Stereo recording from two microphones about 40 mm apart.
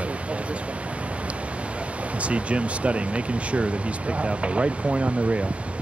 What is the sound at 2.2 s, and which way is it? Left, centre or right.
Speech, right.